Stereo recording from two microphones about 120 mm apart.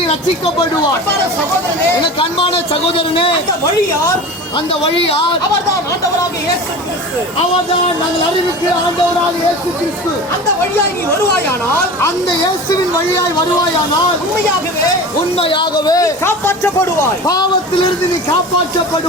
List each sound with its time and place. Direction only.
3.0 s speech: 50° left (ahead or behind)
4.5 s speech: 45° left (ahead or behind)
15.4 s speech: 45° left (ahead or behind); by 16.9 s 20° left (ahead or behind)
17.2 s speech: 35° left (ahead or behind)